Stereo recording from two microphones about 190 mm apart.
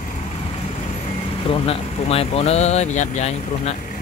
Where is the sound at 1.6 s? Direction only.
30° left (ahead or behind).